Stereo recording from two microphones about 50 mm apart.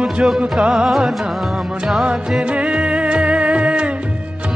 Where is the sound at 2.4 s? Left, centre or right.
Right.